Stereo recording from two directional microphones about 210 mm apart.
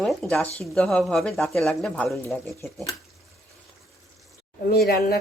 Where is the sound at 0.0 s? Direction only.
Centre (ahead or behind).